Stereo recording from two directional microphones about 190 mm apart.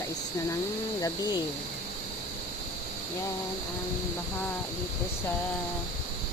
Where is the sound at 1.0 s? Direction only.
20° left (ahead or behind).